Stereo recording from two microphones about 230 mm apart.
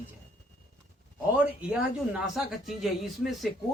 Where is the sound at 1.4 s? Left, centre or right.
Centre.